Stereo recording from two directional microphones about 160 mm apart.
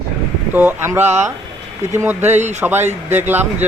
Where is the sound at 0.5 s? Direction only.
10° right (ahead or behind).